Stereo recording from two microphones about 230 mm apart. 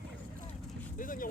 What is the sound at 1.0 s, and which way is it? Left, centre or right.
Vehicle, left.